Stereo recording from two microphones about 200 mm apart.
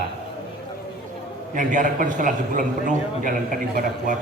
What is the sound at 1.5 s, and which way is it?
A man's voice, 40° right (ahead or behind).